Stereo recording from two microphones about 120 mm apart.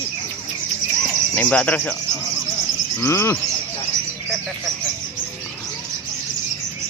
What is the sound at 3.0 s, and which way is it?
Speech, 20° left (ahead or behind).